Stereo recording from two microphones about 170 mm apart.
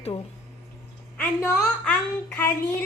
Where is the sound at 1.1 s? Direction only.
10° left (ahead or behind).